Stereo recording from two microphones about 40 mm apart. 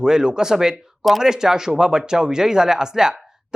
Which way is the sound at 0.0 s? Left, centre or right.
Centre.